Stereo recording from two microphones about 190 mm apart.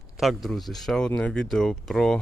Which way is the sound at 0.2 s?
Centre (ahead or behind).